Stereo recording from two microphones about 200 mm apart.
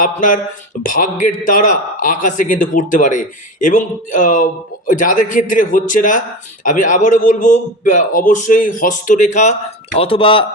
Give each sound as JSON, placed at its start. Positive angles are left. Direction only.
{"t": 0.0, "sound": "a man's voice", "side_deg": 40}